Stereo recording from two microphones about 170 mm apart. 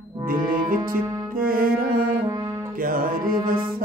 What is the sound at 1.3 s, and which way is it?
Music, 55° right (ahead or behind).